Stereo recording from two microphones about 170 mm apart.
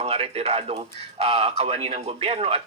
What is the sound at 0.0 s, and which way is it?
A man's voice, 35° right (ahead or behind).